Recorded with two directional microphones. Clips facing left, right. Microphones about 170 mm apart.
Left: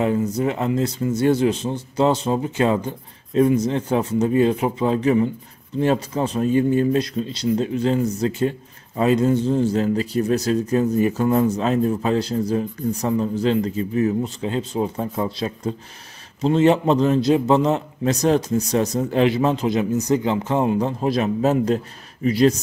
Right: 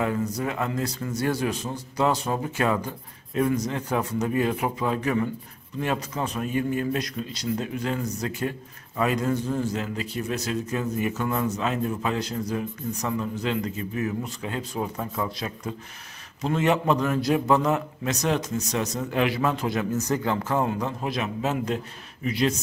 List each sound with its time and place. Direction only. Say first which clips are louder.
0.0 s speech: left 6 dB; 25° left (ahead or behind)